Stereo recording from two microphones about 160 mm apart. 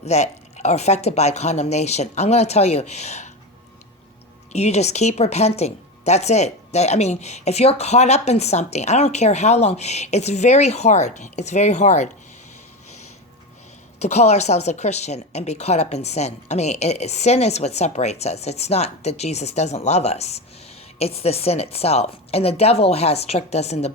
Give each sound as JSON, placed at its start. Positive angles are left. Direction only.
{"t": 0.0, "sound": "a woman's voice", "side_deg": 45}
{"t": 4.5, "sound": "a woman's voice", "side_deg": 45}
{"t": 14.0, "sound": "a woman's voice", "side_deg": 45}